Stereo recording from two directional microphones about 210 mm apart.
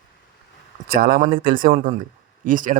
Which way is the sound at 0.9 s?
45° right (ahead or behind).